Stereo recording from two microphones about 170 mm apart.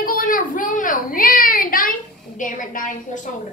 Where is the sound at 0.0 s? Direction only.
55° left (ahead or behind).